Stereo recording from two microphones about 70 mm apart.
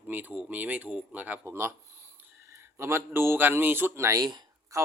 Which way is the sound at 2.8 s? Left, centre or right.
Right.